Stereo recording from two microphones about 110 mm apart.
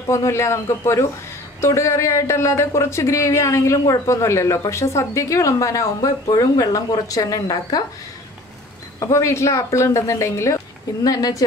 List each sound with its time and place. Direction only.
0.1 s speech: 25° left (ahead or behind)
9.0 s speech: 25° left (ahead or behind)